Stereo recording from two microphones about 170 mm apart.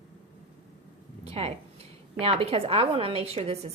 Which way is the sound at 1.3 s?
35° right (ahead or behind).